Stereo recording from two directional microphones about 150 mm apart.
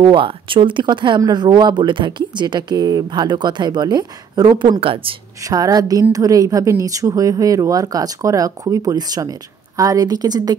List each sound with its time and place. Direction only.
0.0 s speech: 35° right (ahead or behind)
5.4 s speech: 25° right (ahead or behind)